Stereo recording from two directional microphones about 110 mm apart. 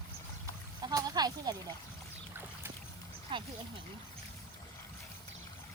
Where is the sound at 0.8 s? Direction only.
35° right (ahead or behind).